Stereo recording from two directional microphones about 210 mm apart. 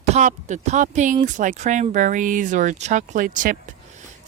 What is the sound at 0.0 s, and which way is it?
Speech, 35° right (ahead or behind).